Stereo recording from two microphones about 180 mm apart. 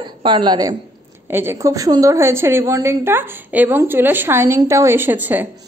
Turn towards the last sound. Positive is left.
turn(degrees=-10)  # may be behind; listen again after turning